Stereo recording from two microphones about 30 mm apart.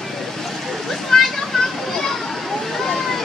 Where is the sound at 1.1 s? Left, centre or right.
Centre.